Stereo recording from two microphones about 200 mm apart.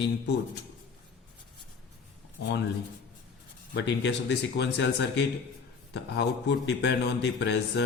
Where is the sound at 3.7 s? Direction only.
60° left (ahead or behind).